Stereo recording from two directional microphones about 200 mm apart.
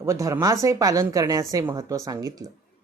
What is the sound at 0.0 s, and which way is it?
Speech, 15° right (ahead or behind).